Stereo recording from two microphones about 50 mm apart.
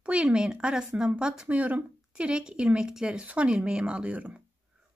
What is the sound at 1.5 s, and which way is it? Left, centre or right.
Speech, right.